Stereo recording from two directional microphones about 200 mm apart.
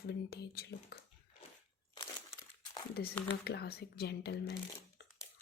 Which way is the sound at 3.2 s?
55° left (ahead or behind).